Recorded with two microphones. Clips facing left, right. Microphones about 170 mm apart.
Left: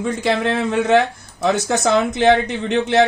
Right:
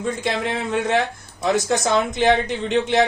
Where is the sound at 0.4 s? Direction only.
75° left (ahead or behind).